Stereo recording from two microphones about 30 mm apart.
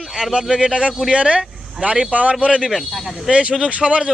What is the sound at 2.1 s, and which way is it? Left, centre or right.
Speech, right.